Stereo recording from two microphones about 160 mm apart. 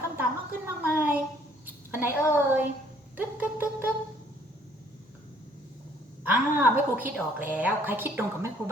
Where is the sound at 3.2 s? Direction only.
15° right (ahead or behind).